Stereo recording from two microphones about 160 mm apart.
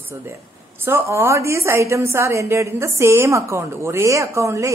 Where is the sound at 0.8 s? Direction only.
15° right (ahead or behind).